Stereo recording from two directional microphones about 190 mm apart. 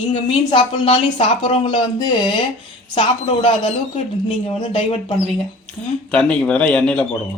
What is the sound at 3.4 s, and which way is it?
A woman's voice, 30° left (ahead or behind).